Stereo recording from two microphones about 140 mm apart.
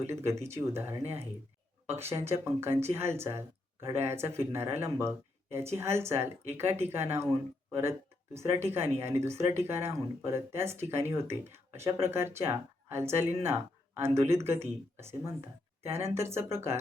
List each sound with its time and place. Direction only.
0.1 s speech: 20° right (ahead or behind)